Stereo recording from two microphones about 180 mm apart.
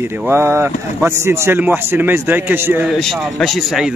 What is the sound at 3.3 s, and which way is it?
Speech, centre (ahead or behind).